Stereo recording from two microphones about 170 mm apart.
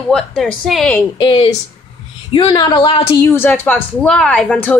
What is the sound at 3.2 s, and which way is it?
A woman's voice, 15° left (ahead or behind).